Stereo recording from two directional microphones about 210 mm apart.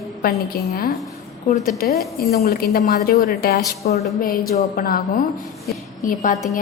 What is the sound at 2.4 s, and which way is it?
A woman's voice, 45° left (ahead or behind).